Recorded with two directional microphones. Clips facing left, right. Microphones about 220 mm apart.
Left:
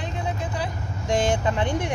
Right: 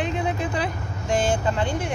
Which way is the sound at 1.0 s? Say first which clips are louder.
Even; 20° left (ahead or behind).